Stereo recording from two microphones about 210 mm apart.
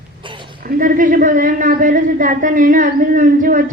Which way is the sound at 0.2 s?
25° right (ahead or behind).